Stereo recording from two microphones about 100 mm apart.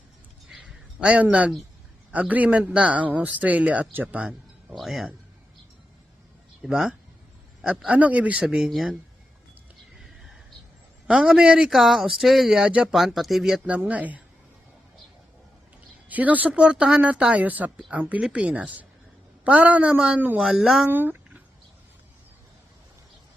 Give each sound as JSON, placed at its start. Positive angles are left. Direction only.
{"t": 0.5, "sound": "a sound", "side_deg": -10}
{"t": 2.1, "sound": "speech", "side_deg": -15}
{"t": 4.7, "sound": "speech", "side_deg": 0}
{"t": 6.6, "sound": "speech", "side_deg": -5}
{"t": 11.1, "sound": "speech", "side_deg": -10}
{"t": 16.0, "sound": "speech", "side_deg": -15}
{"t": 20.4, "sound": "speech", "side_deg": -5}
{"t": 20.9, "sound": "a sound", "side_deg": -20}